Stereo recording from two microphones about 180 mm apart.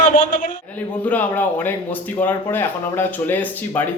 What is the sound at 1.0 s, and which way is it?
Speech, 10° left (ahead or behind).